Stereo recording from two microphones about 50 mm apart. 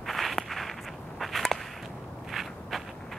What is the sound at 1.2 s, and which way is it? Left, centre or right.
Whip, centre.